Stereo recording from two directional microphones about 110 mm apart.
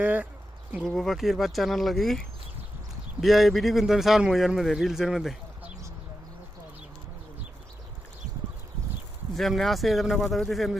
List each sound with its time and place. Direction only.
0.0 s speech: 15° right (ahead or behind)
0.9 s a man's voice: centre (ahead or behind)
9.3 s a man's voice: centre (ahead or behind)